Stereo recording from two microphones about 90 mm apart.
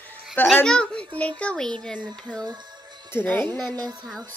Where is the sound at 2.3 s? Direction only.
15° right (ahead or behind).